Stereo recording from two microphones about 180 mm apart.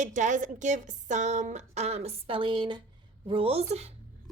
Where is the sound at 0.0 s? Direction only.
45° right (ahead or behind).